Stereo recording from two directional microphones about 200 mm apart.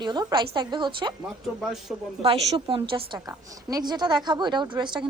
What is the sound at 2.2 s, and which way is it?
A woman's voice, 25° right (ahead or behind).